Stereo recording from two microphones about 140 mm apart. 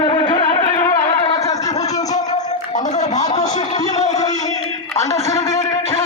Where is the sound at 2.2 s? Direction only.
55° left (ahead or behind).